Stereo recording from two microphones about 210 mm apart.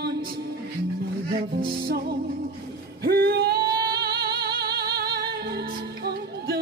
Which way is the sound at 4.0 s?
50° right (ahead or behind).